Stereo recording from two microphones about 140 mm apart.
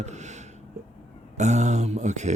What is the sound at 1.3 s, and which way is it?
Speech, 55° right (ahead or behind).